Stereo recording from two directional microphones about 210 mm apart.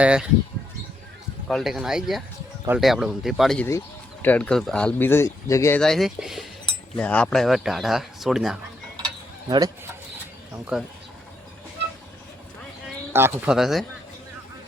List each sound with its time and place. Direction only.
0.0 s speech: 5° right (ahead or behind)
1.5 s speech: centre (ahead or behind)
5.8 s speech: centre (ahead or behind)
9.5 s speech: 20° right (ahead or behind)
10.7 s speech: 5° right (ahead or behind)
13.1 s speech: 10° right (ahead or behind)